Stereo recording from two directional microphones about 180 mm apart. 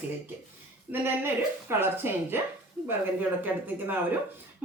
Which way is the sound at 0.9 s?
10° right (ahead or behind).